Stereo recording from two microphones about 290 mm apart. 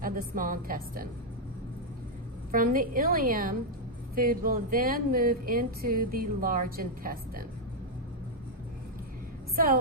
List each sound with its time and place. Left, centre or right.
0.0 s speech: right
2.5 s speech: right